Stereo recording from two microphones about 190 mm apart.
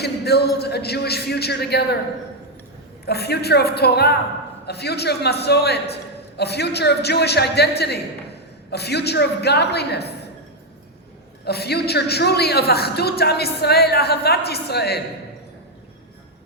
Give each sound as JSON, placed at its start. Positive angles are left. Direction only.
{"t": 0.0, "sound": "a woman's voice", "side_deg": 60}
{"t": 3.1, "sound": "a woman's voice", "side_deg": 60}
{"t": 8.7, "sound": "a woman's voice", "side_deg": 60}
{"t": 11.4, "sound": "a woman's voice", "side_deg": 60}